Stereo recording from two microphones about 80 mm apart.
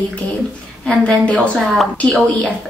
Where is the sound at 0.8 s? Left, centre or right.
Centre.